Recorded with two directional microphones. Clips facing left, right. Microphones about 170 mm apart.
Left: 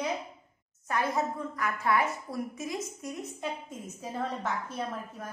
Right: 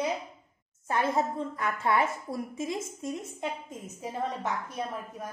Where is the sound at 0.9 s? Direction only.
25° right (ahead or behind).